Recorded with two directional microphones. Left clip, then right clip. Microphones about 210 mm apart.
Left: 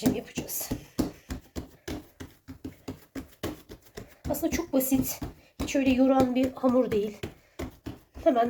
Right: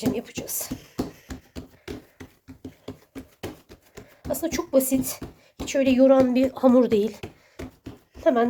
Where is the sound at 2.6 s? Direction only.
Centre (ahead or behind).